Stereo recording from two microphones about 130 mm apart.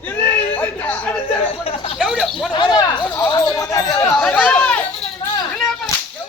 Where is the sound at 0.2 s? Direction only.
15° left (ahead or behind).